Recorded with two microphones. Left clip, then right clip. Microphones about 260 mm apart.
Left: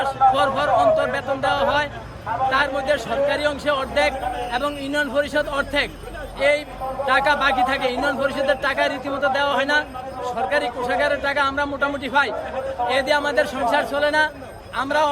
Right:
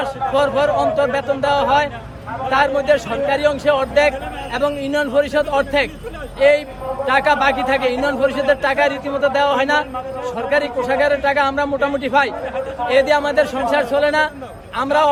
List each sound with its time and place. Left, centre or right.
0.0 s a man's voice: centre
7.1 s a man's voice: centre